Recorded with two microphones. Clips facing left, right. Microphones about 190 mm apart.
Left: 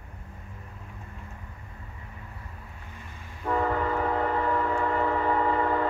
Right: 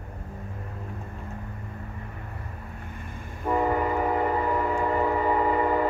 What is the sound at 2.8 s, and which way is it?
Vehicle, 55° right (ahead or behind).